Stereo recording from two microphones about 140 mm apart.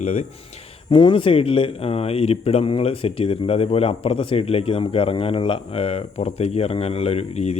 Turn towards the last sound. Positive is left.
turn(degrees=50)  # may be behind; listen again after turning